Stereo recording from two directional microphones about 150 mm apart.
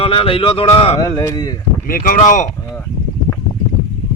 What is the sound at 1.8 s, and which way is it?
Speech, 65° left (ahead or behind).